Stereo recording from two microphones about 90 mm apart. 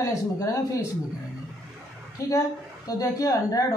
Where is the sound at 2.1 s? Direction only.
40° left (ahead or behind).